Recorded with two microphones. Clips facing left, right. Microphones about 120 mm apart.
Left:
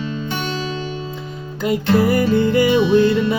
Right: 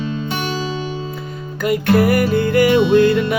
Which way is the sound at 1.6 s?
20° left (ahead or behind).